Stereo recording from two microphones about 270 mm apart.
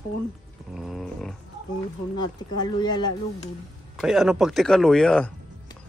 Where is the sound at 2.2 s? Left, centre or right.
Centre.